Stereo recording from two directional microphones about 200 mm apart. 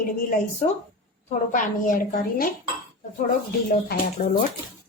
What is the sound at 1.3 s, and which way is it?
A woman's voice, 40° left (ahead or behind).